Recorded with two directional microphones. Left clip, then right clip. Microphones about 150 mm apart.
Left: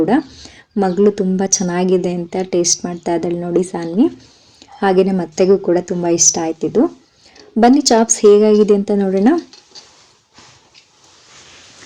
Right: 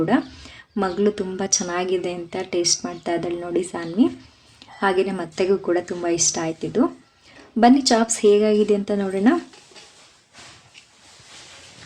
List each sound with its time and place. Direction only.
0.0 s speech: 15° left (ahead or behind)